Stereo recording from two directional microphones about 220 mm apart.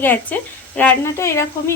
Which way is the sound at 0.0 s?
10° left (ahead or behind).